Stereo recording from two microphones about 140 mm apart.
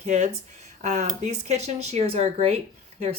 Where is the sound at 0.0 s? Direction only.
50° right (ahead or behind).